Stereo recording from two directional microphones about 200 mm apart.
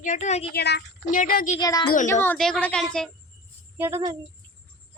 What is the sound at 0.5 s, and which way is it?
Speech, 60° left (ahead or behind).